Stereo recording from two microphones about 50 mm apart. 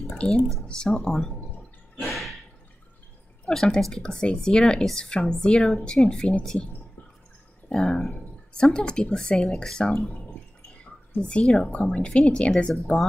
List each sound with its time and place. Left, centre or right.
0.1 s speech: centre
2.0 s a sound: centre
3.4 s speech: centre
7.7 s speech: centre
10.8 s a sound: left
11.9 s speech: left